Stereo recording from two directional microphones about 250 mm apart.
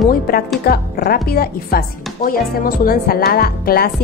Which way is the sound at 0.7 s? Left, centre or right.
Left.